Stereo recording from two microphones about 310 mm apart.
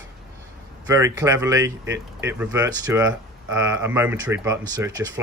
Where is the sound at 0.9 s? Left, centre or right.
Centre.